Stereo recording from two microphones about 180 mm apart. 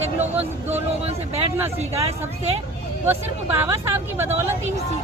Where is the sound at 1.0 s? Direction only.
35° right (ahead or behind).